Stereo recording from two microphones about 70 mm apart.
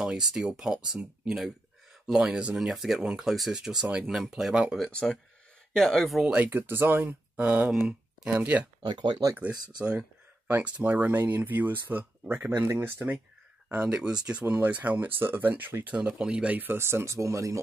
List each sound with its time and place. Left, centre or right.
0.0 s speech: centre
2.2 s speech: centre
2.5 s speech: centre
4.1 s speech: centre
4.9 s speech: centre
6.2 s speech: right
7.7 s speech: centre
8.4 s speech: right
8.8 s speech: right
9.4 s speech: centre
16.5 s speech: right